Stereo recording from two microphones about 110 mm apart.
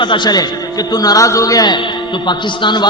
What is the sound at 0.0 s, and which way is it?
A man's voice, 45° left (ahead or behind).